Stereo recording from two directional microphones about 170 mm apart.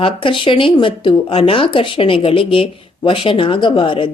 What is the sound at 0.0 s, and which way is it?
Speech, 30° left (ahead or behind).